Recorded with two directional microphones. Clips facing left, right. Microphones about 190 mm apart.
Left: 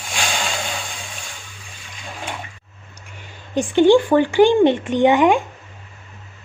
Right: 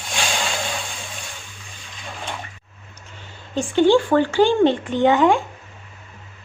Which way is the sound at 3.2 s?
15° left (ahead or behind).